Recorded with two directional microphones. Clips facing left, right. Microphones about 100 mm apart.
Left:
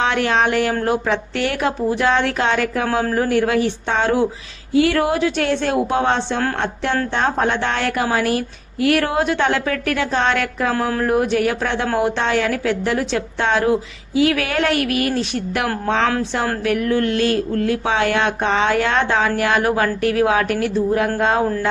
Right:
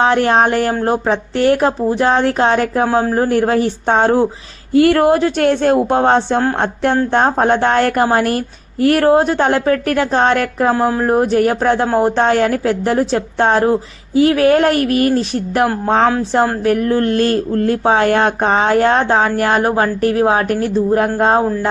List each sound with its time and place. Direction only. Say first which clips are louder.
0.0 s speech: right 5 dB; 35° right (ahead or behind)
4.7 s a woman's voice: right 6 dB; 50° right (ahead or behind)